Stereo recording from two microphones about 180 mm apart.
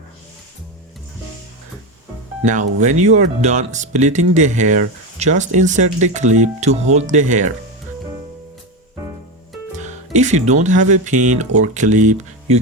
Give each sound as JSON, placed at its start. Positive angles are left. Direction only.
{"t": 2.4, "sound": "speech", "side_deg": -40}
{"t": 9.7, "sound": "speech", "side_deg": -40}